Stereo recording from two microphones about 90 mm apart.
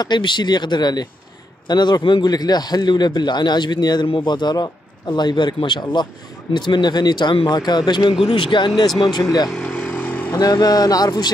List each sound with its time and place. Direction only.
0.0 s a man's voice: 55° left (ahead or behind)
8.3 s a man's voice: 70° left (ahead or behind)
9.5 s vehicle: 10° left (ahead or behind)
10.4 s a man's voice: 45° left (ahead or behind)